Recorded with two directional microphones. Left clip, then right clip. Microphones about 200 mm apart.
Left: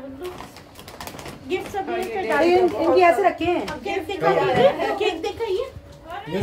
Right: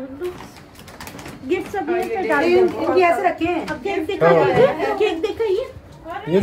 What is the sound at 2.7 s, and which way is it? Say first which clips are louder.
A woman's voice: even; 50° left (ahead or behind).